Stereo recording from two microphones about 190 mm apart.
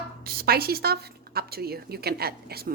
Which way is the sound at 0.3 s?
55° right (ahead or behind).